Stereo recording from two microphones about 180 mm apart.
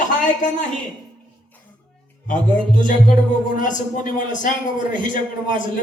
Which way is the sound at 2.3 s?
45° left (ahead or behind).